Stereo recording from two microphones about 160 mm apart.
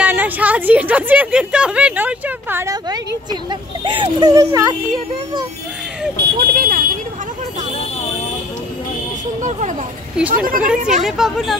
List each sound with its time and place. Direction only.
0.0 s a sound: 10° right (ahead or behind)
3.8 s speech: 30° right (ahead or behind)
6.1 s vehicle: 70° right (ahead or behind)
9.4 s speech: 45° right (ahead or behind)
10.3 s speech: 60° right (ahead or behind)
11.1 s speech: centre (ahead or behind)